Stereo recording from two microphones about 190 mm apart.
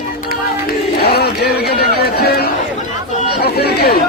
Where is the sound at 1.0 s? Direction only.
55° left (ahead or behind).